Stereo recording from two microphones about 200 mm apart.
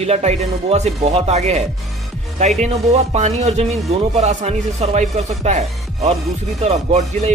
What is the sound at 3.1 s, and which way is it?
Speech, 35° right (ahead or behind).